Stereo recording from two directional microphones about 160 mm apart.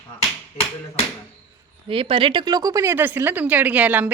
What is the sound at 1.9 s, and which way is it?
Speech, 35° right (ahead or behind).